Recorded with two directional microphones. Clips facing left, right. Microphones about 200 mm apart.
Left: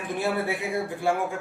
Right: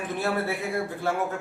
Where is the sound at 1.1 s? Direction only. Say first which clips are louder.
Left 3 dB; 15° left (ahead or behind).